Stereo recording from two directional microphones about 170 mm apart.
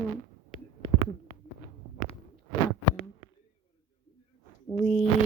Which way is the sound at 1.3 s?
70° left (ahead or behind).